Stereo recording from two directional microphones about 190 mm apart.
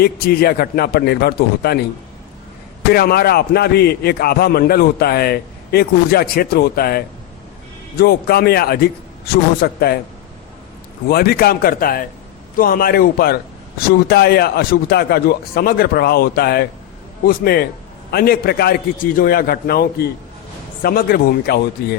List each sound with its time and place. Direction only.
0.0 s a man's voice: 55° left (ahead or behind)
2.9 s a man's voice: 55° left (ahead or behind)
11.1 s a man's voice: 55° left (ahead or behind)